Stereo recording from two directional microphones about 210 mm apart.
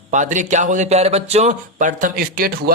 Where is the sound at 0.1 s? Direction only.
35° right (ahead or behind).